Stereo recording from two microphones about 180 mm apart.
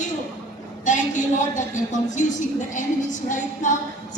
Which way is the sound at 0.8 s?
45° left (ahead or behind).